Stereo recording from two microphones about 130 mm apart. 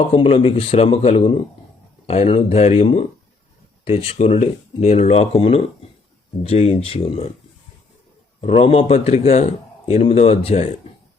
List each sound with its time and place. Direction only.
0.2 s speech: 45° left (ahead or behind)
8.4 s speech: 50° left (ahead or behind)